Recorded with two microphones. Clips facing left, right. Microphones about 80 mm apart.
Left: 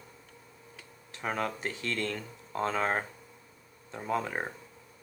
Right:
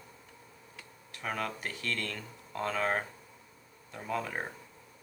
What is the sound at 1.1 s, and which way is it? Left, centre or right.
Speech, left.